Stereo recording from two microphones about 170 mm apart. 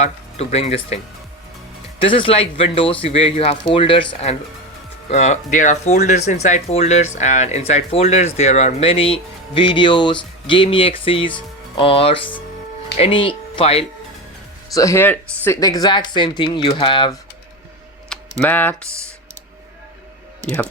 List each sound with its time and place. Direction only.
0.0 s speech: 40° left (ahead or behind)
2.0 s speech: 30° left (ahead or behind)
14.7 s speech: 20° left (ahead or behind)
15.6 s speech: 25° left (ahead or behind)
18.1 s speech: 10° left (ahead or behind)